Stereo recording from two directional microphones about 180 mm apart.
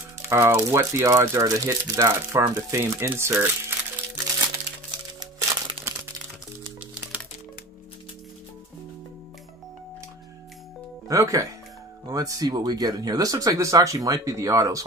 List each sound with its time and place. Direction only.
0.3 s speech: 15° right (ahead or behind)
5.2 s music: 30° right (ahead or behind)
11.1 s speech: 20° right (ahead or behind)